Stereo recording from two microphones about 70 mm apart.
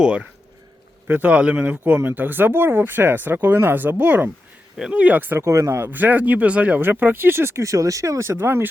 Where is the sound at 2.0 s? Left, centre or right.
Right.